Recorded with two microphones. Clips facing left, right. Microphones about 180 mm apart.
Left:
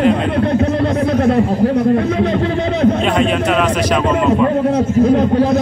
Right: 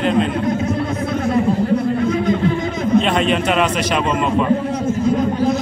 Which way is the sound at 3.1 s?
5° right (ahead or behind).